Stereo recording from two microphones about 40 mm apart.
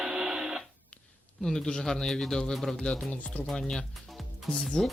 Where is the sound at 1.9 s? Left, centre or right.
Centre.